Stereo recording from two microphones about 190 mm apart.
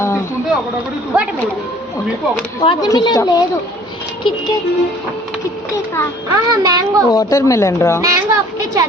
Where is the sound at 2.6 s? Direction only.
25° left (ahead or behind).